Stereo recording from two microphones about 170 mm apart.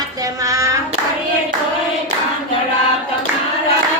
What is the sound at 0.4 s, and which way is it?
Hands, 20° right (ahead or behind).